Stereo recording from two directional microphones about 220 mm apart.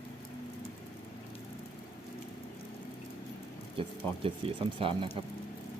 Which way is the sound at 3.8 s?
25° right (ahead or behind).